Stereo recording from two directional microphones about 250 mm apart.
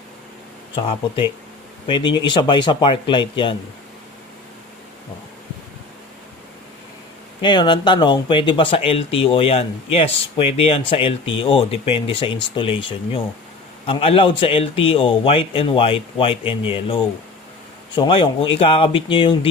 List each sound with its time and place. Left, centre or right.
0.8 s speech: left
7.4 s speech: centre